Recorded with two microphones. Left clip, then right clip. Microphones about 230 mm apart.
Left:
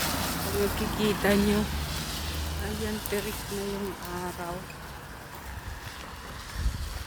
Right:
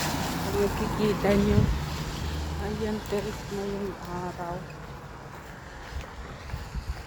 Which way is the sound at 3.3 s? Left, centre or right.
Left.